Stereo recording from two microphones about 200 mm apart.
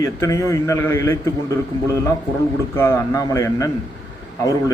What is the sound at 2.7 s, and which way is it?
A man's voice, 15° left (ahead or behind).